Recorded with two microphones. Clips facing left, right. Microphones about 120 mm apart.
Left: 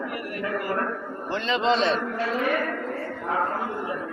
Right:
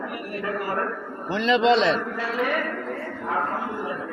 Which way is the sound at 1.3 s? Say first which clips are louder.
Right 4 dB; 90° right.